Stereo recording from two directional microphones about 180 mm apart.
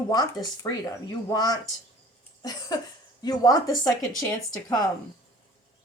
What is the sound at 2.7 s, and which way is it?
Speech, 20° left (ahead or behind).